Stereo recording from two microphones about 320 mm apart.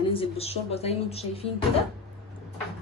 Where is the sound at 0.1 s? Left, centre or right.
Centre.